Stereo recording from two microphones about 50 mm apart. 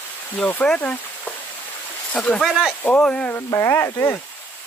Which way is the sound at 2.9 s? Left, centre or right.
Left.